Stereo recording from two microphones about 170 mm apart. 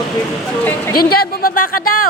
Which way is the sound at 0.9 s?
65° left (ahead or behind).